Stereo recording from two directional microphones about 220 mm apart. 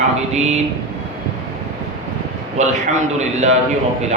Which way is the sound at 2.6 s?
30° right (ahead or behind).